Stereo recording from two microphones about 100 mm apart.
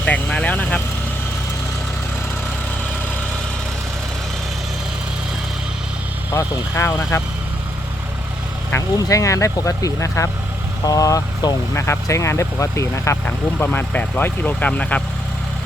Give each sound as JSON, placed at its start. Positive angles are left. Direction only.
{"t": 0.0, "sound": "vehicle", "side_deg": 10}
{"t": 6.7, "sound": "speech", "side_deg": 25}
{"t": 8.7, "sound": "speech", "side_deg": 35}
{"t": 13.2, "sound": "speech", "side_deg": 20}